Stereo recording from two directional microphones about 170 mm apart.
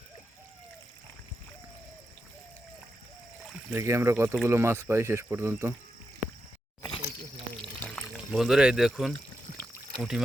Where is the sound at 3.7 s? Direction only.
15° right (ahead or behind).